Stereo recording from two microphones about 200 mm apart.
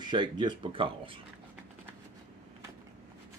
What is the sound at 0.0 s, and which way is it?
Speech, 20° right (ahead or behind).